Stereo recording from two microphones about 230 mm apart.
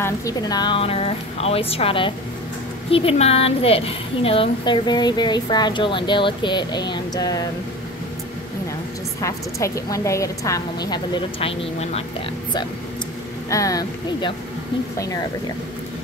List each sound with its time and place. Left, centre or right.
0.0 s a woman's voice: centre
9.2 s a woman's voice: centre
13.5 s a woman's voice: centre